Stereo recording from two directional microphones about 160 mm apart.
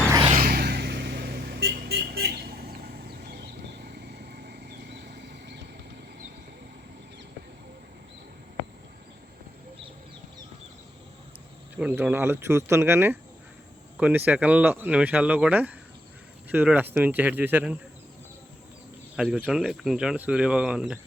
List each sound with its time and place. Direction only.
0.3 s vehicle: 70° right (ahead or behind); by 5.5 s 90° right
11.8 s speech: 10° right (ahead or behind)
19.1 s speech: 5° right (ahead or behind)